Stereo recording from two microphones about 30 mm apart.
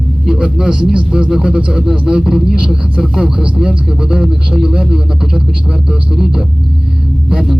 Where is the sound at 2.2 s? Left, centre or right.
Centre.